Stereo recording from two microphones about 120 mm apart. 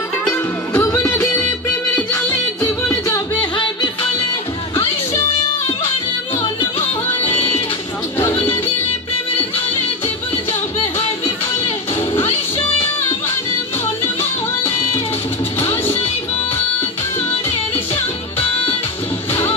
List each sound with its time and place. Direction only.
0.3 s music: 25° left (ahead or behind)
3.3 s music: 45° left (ahead or behind)
7.2 s music: 50° left (ahead or behind)